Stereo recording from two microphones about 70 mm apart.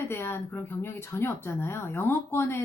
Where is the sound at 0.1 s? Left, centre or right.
Left.